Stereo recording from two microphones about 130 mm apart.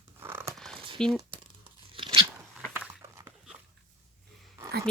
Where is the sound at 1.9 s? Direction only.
40° right (ahead or behind).